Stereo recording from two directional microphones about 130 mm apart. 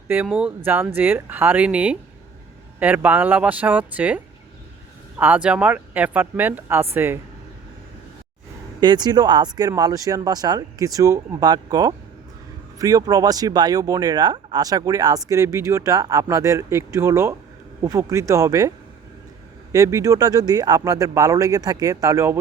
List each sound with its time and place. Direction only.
0.1 s speech: 10° right (ahead or behind)
8.8 s speech: 35° right (ahead or behind)
19.7 s speech: 25° right (ahead or behind)